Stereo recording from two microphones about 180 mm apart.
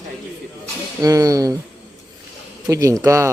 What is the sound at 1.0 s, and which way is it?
Speech, 20° right (ahead or behind).